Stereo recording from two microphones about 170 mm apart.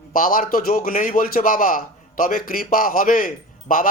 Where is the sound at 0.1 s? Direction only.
55° left (ahead or behind).